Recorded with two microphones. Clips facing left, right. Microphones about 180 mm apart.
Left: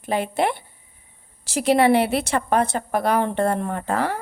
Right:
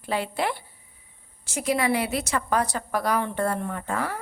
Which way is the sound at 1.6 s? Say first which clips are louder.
Left 7 dB; 65° left (ahead or behind).